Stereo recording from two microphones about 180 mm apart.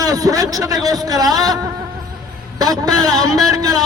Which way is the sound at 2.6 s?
20° right (ahead or behind).